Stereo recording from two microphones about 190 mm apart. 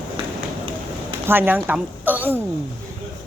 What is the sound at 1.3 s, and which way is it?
A woman's voice, 10° right (ahead or behind).